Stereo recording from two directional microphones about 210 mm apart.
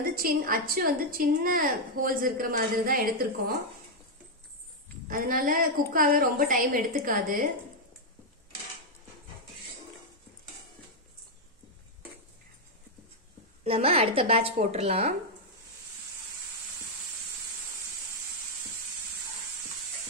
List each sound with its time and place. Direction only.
0.0 s a woman's voice: 45° right (ahead or behind)
5.0 s a woman's voice: 45° right (ahead or behind)
13.7 s a woman's voice: 30° right (ahead or behind)